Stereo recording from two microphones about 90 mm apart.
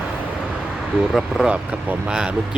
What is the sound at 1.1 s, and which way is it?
Speech, 5° right (ahead or behind).